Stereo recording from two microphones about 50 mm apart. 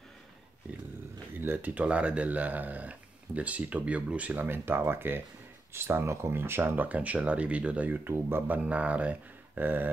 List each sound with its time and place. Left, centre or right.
1.4 s speech: right
1.8 s speech: right
4.5 s speech: right
8.1 s speech: right
8.6 s speech: right
9.6 s speech: right